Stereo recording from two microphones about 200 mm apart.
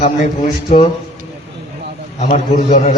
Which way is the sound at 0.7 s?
35° left (ahead or behind).